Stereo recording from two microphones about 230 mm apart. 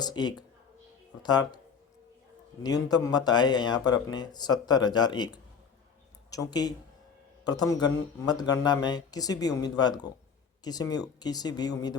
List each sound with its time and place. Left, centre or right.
0.0 s speech: centre
2.6 s speech: centre